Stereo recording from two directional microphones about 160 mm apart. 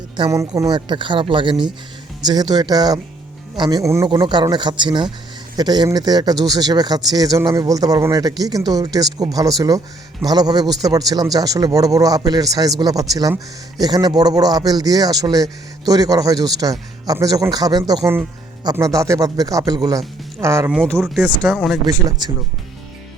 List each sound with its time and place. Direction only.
0.3 s speech: 20° right (ahead or behind)
20.8 s speech: centre (ahead or behind)
21.8 s speech: 20° right (ahead or behind)